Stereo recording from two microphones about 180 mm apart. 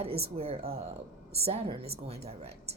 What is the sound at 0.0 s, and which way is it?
A woman's voice, 35° right (ahead or behind).